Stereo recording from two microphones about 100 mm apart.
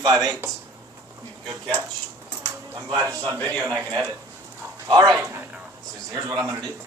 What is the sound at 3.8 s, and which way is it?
A man's voice, 40° right (ahead or behind).